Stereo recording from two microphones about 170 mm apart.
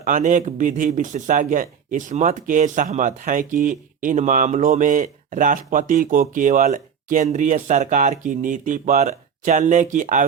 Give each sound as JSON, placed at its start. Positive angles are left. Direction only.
{"t": 0.0, "sound": "speech", "side_deg": -50}